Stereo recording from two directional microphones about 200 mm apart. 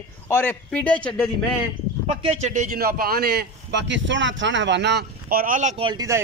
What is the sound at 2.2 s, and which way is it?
A man's voice, 30° right (ahead or behind).